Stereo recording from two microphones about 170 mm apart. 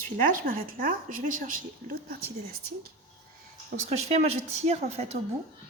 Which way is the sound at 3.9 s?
40° right (ahead or behind).